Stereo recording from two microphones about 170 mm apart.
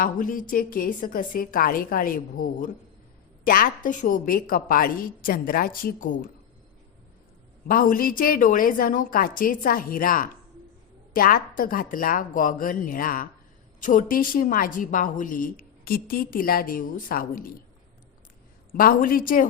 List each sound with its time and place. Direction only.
0.0 s a woman's voice: 55° left (ahead or behind)
7.7 s a woman's voice: 55° left (ahead or behind)
18.7 s a woman's voice: 55° left (ahead or behind)